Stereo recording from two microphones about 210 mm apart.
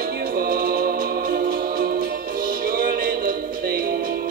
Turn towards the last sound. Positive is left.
turn(degrees=-45)  # may be behind; listen again after turning